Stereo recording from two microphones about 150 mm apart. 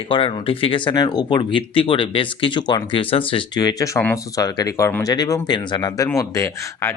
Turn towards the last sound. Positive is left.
turn(degrees=20)  # may be behind; listen again after turning